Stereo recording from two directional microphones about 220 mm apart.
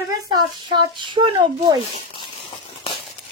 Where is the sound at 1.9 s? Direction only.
20° left (ahead or behind).